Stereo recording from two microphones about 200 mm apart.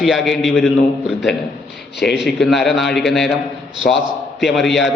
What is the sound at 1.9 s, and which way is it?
Speech, 55° left (ahead or behind).